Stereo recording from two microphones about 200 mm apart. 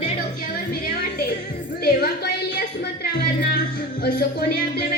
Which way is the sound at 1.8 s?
50° left (ahead or behind).